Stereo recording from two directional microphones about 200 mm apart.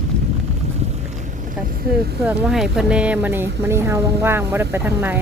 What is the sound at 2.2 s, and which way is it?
Speech, 5° right (ahead or behind).